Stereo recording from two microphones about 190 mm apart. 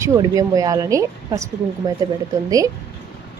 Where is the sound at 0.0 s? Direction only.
15° right (ahead or behind).